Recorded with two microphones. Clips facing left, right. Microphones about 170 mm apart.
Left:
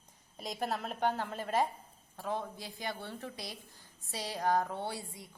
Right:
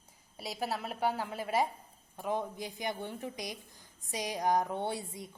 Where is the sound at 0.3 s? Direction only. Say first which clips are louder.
Even; 5° right (ahead or behind).